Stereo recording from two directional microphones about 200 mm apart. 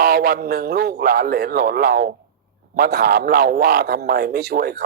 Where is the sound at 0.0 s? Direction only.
50° right (ahead or behind).